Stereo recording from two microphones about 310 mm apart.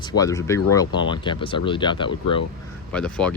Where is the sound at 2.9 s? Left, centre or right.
Centre.